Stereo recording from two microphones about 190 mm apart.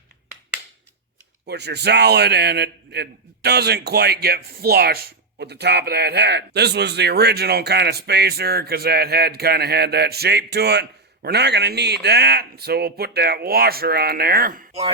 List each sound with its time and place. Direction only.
1.5 s a man's voice: 60° right (ahead or behind)